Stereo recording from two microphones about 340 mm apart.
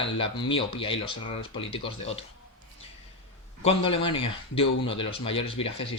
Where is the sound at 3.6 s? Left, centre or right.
Centre.